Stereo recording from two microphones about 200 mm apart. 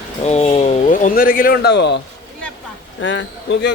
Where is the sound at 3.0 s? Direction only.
70° left (ahead or behind).